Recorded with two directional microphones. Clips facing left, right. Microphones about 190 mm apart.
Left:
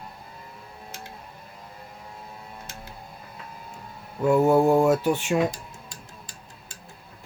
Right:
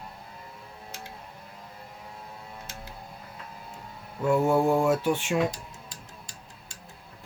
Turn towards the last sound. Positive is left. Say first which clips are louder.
# left 1 dB
turn(degrees=50)  # may be behind; listen again after turning